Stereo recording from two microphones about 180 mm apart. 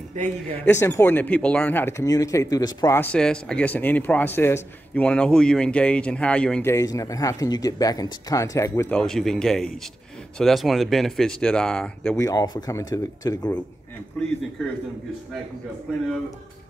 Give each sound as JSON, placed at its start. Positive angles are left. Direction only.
{"t": 0.7, "sound": "speech", "side_deg": 15}
{"t": 3.0, "sound": "speech", "side_deg": 5}
{"t": 8.9, "sound": "speech", "side_deg": 5}
{"t": 12.2, "sound": "speech", "side_deg": 20}